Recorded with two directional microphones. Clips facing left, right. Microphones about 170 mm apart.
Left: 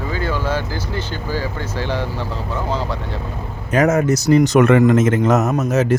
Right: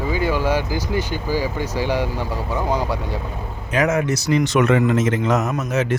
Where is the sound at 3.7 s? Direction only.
40° left (ahead or behind).